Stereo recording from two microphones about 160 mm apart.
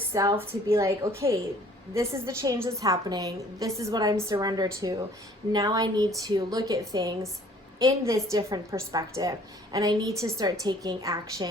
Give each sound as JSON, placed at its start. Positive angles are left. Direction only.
{"t": 0.1, "sound": "a woman's voice", "side_deg": -20}